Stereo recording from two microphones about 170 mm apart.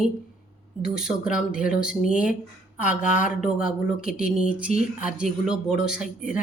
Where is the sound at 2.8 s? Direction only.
45° left (ahead or behind).